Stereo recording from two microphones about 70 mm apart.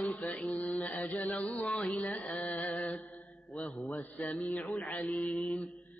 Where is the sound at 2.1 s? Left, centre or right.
Centre.